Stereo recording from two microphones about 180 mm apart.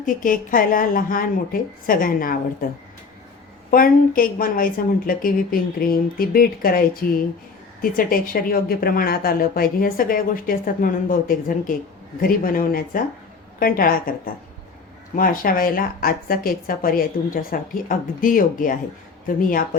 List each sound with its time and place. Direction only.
0.0 s speech: 50° left (ahead or behind)
3.7 s speech: 50° left (ahead or behind)
15.1 s speech: 50° left (ahead or behind)